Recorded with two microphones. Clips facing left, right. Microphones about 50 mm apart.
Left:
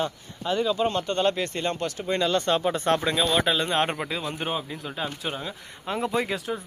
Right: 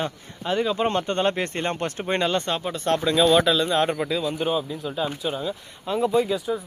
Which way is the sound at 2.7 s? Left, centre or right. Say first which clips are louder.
Right 2 dB; centre.